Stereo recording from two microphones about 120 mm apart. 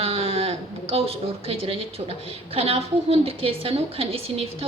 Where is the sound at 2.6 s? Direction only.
55° right (ahead or behind).